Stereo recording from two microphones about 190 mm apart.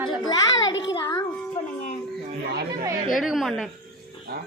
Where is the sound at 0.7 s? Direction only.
70° left (ahead or behind).